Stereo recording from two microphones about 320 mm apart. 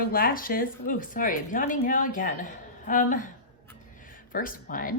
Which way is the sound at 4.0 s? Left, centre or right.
Left.